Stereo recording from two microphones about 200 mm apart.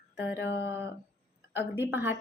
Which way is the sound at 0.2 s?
60° left (ahead or behind).